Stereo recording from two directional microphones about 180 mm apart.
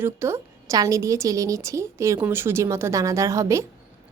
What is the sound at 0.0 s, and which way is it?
Speech, 15° right (ahead or behind).